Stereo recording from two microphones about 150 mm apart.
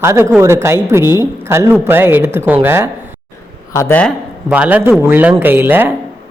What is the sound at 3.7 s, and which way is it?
Speech, 15° left (ahead or behind).